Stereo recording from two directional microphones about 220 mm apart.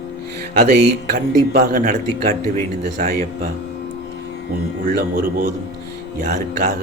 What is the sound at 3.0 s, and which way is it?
Speech, 35° right (ahead or behind).